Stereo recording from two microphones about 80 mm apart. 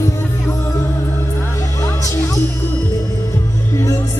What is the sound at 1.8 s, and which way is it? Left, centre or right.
Music, left.